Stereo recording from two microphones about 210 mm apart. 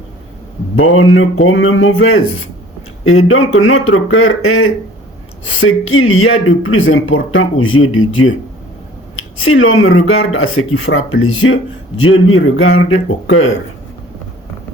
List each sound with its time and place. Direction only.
0.8 s speech: 75° left (ahead or behind)
11.9 s a man's voice: 85° left